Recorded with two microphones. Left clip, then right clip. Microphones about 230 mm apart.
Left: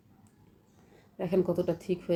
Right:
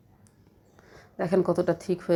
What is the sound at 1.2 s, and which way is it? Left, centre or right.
Speech, right.